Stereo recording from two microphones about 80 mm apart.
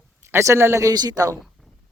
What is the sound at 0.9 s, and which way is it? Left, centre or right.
Speech, right.